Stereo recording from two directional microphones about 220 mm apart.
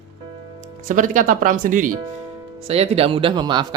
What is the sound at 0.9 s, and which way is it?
Speech, 35° right (ahead or behind).